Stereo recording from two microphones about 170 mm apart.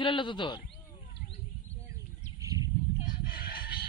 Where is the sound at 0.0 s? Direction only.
30° left (ahead or behind).